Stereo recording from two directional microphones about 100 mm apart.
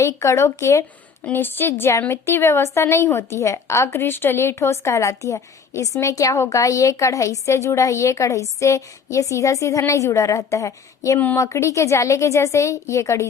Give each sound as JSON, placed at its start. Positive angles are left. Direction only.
{"t": 0.0, "sound": "a woman's voice", "side_deg": 30}